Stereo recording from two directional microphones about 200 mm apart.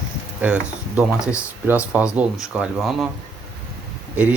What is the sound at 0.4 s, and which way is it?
Speech, 5° right (ahead or behind).